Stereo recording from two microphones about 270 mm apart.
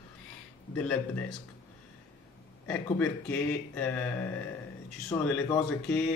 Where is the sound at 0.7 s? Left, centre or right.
Centre.